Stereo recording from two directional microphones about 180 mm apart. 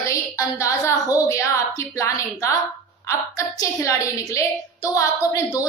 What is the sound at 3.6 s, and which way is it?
A woman's voice, 20° left (ahead or behind).